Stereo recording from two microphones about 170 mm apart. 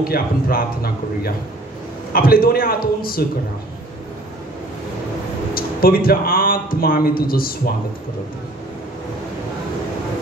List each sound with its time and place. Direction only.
0.0 s speech: 60° left (ahead or behind)
5.5 s speech: 60° left (ahead or behind)